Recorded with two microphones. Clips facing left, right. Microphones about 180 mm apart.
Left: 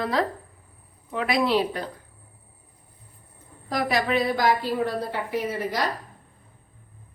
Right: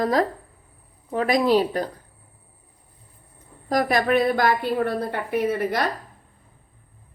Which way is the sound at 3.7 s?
50° right (ahead or behind).